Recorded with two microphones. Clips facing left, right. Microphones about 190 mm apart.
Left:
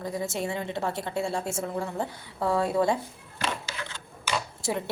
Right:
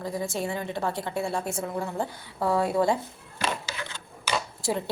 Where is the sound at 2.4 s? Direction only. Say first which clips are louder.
Right 1 dB; 25° right (ahead or behind).